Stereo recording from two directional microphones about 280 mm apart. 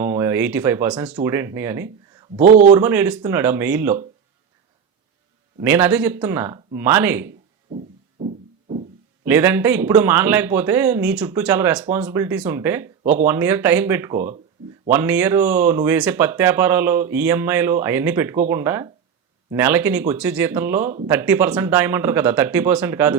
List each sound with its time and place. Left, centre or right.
0.0 s speech: centre
2.4 s speech: right
2.7 s speech: centre
5.5 s speech: centre
7.7 s music: centre
9.2 s speech: centre